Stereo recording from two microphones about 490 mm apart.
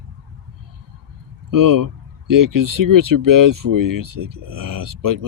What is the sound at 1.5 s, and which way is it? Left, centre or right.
Speech, right.